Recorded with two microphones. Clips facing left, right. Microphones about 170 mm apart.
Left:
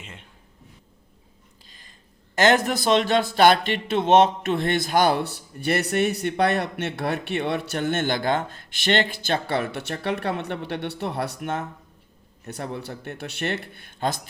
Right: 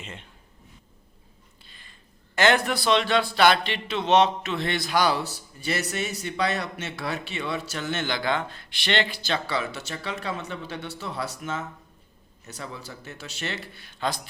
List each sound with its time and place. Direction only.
0.0 s speech: 10° left (ahead or behind)
1.6 s a sound: 40° left (ahead or behind)
2.3 s speech: 40° left (ahead or behind)